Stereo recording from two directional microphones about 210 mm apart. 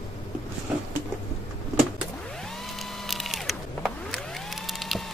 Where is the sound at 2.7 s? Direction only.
Centre (ahead or behind).